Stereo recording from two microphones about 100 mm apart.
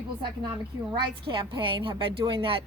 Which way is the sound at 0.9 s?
55° right (ahead or behind).